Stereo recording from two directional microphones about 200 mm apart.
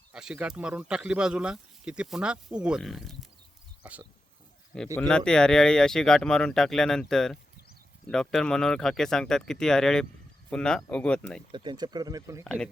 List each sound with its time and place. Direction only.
0.1 s speech: 5° right (ahead or behind)
4.9 s speech: 5° left (ahead or behind)
11.5 s speech: 25° right (ahead or behind)